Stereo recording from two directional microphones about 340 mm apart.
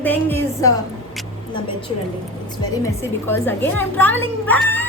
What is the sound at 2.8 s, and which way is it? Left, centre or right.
A woman's voice, centre.